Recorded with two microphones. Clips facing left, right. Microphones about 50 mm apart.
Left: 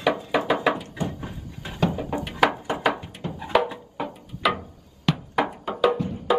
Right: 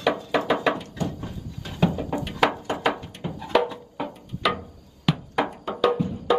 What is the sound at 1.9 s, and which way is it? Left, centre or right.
Music, centre.